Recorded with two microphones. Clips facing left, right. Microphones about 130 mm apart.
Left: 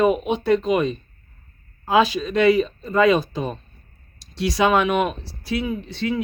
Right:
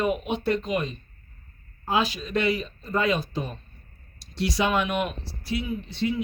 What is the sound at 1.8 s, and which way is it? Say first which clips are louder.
Speech: left 7 dB; 90° left.